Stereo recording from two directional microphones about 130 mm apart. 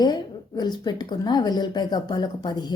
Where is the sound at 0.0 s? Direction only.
30° left (ahead or behind).